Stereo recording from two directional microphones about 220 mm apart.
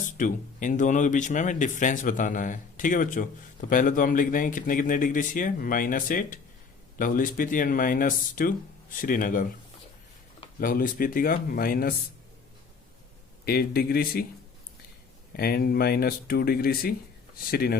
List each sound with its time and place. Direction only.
0.2 s speech: 35° left (ahead or behind)
10.6 s speech: 40° left (ahead or behind)
13.4 s speech: 45° left (ahead or behind)
15.4 s speech: 45° left (ahead or behind)